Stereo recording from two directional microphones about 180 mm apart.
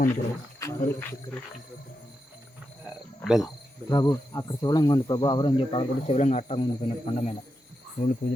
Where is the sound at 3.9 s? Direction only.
20° left (ahead or behind).